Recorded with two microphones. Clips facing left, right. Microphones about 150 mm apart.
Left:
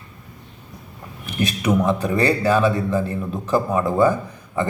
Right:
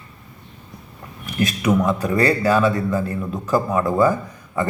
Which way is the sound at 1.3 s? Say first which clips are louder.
Right 1 dB; 25° left (ahead or behind).